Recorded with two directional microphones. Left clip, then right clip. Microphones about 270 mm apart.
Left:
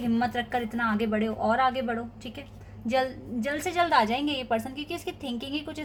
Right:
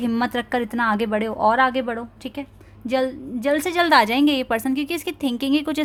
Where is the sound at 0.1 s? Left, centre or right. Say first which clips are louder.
Right 2 dB; right.